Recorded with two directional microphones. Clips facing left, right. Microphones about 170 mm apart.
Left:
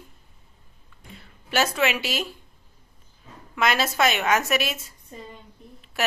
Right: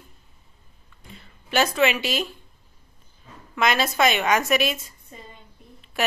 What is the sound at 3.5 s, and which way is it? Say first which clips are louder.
A woman's voice: right 1 dB; 5° left (ahead or behind).